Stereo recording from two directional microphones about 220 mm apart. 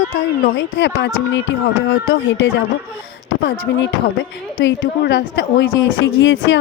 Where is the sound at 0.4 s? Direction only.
55° left (ahead or behind).